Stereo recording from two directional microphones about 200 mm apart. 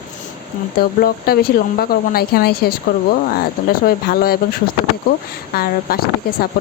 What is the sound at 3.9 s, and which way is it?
Speech, 50° left (ahead or behind).